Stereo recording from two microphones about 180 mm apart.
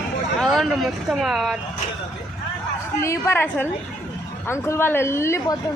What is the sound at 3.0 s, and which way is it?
Speech, 15° left (ahead or behind).